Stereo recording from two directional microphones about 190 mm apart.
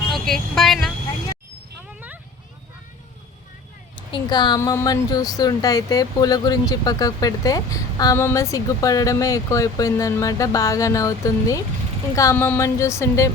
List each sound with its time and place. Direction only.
0.1 s vehicle: centre (ahead or behind)
1.9 s a sound: 10° right (ahead or behind)
4.1 s a woman's voice: 25° left (ahead or behind)